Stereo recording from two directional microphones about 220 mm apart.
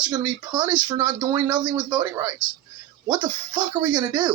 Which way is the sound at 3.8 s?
20° right (ahead or behind).